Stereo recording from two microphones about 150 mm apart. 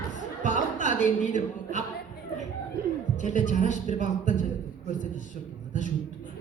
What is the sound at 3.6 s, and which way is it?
Speech, 55° left (ahead or behind).